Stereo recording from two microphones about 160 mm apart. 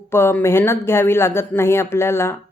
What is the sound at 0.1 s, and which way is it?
Speech, 15° left (ahead or behind).